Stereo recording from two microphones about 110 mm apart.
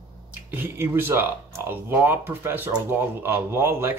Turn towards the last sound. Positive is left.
turn(degrees=-20)  # may be behind; listen again after turning